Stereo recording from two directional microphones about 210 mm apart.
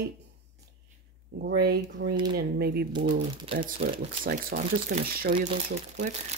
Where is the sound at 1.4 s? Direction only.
50° right (ahead or behind).